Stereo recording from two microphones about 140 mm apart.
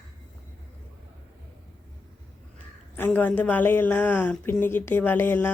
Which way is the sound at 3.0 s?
10° left (ahead or behind).